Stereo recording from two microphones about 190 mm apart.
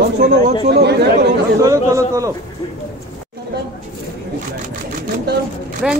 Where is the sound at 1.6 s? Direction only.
15° right (ahead or behind).